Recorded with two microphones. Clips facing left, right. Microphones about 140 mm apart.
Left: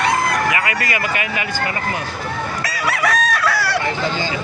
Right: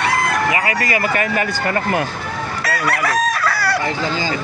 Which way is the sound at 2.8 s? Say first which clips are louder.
Even; centre (ahead or behind).